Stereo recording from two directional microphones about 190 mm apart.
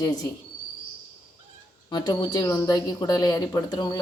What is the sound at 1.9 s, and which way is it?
Speech, 20° left (ahead or behind).